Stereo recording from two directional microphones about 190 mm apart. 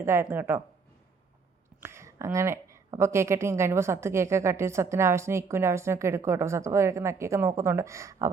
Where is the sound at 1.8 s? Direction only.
15° right (ahead or behind).